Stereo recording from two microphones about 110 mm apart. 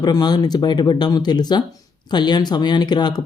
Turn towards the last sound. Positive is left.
turn(degrees=40)  # may be behind; listen again after turning